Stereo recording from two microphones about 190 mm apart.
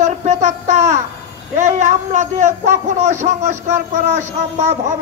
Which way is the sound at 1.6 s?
40° right (ahead or behind).